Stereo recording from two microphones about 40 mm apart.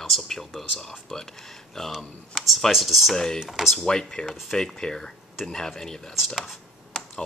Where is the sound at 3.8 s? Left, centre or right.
Centre.